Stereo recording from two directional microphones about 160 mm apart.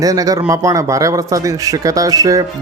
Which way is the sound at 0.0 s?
20° right (ahead or behind).